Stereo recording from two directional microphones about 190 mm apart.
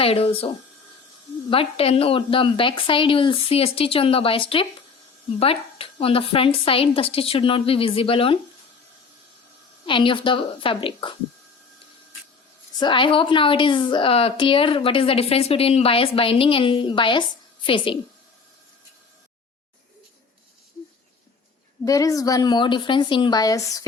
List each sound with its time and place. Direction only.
0.0 s a woman's voice: 30° left (ahead or behind)
9.8 s a woman's voice: 25° left (ahead or behind)
12.8 s a woman's voice: 25° left (ahead or behind)
21.8 s a woman's voice: 15° left (ahead or behind)